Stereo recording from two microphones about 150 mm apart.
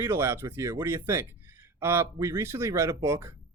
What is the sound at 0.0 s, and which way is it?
Speech, 20° right (ahead or behind).